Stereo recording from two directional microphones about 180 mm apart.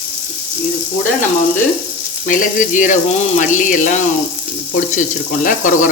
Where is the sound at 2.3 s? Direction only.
50° left (ahead or behind).